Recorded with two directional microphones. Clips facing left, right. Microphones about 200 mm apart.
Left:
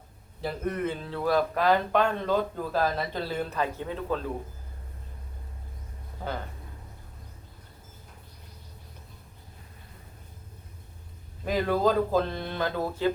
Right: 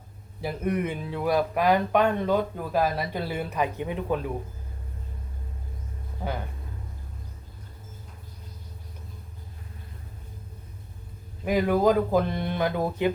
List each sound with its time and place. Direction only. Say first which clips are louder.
0.4 s speech: right 2 dB; 10° right (ahead or behind)
11.4 s speech: right 3 dB; 15° right (ahead or behind)